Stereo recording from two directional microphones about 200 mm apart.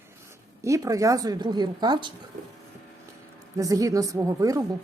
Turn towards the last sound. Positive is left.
turn(degrees=-15)  # may be behind; listen again after turning